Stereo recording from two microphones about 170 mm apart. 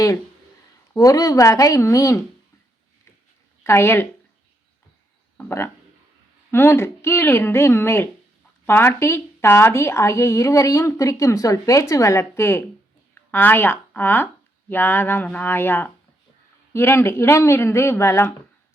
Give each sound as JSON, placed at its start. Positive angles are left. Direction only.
{"t": 0.9, "sound": "speech", "side_deg": 20}
{"t": 3.6, "sound": "speech", "side_deg": 15}
{"t": 5.4, "sound": "a woman's voice", "side_deg": 15}